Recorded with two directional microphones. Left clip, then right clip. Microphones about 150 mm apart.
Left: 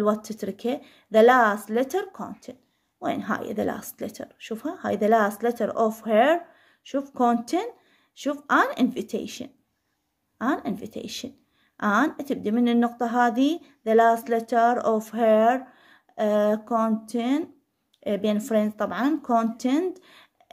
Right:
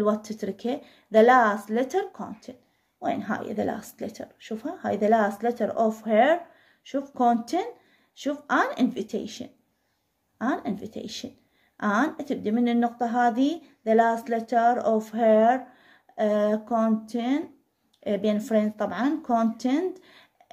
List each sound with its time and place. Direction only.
0.0 s speech: 35° left (ahead or behind)